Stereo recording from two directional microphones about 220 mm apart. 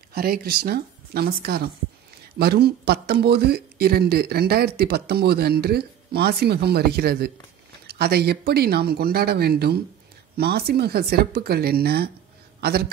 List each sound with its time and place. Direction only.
0.1 s a man's voice: 45° right (ahead or behind)